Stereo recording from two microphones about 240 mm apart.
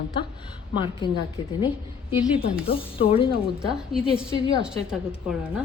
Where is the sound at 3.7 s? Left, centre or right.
Centre.